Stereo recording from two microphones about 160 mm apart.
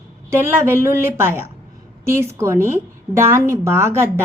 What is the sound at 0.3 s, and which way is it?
A woman's voice, 15° right (ahead or behind).